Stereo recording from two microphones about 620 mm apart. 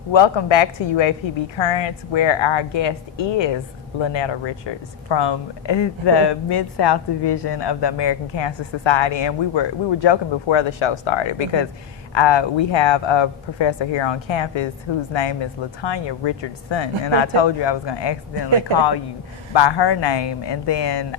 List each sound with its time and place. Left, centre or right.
0.1 s speech: left
19.5 s speech: left